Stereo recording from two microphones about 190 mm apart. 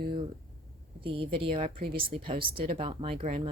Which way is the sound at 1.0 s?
25° right (ahead or behind).